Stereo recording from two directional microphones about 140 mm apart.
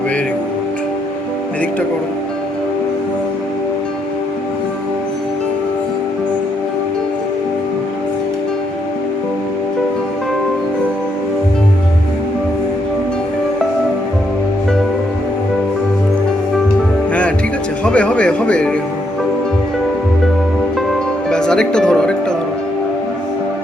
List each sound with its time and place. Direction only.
17.8 s music: 10° left (ahead or behind)
21.2 s music: 5° left (ahead or behind)